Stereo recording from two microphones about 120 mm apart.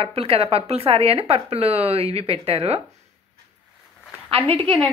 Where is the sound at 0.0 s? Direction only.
55° right (ahead or behind).